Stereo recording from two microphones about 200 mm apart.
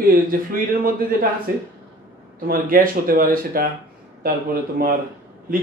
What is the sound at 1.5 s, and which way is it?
A man's voice, 45° right (ahead or behind).